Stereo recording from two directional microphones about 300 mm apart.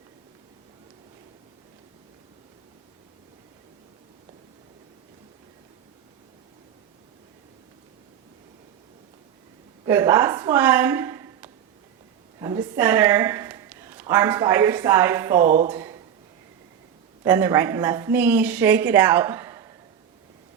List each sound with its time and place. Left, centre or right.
9.8 s a woman's voice: centre
15.4 s speech: right
15.7 s a sound: centre
17.2 s a woman's voice: centre